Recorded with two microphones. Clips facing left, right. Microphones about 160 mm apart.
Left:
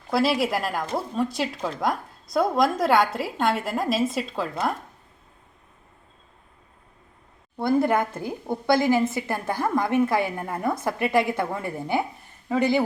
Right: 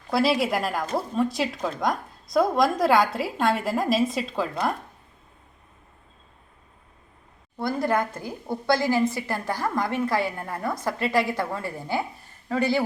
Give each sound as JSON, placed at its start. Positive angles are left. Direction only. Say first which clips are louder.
{"t": 0.1, "sound": "speech", "louder": "even", "side_deg": 0}
{"t": 7.5, "sound": "a woman's voice", "louder": "left 3 dB", "side_deg": 20}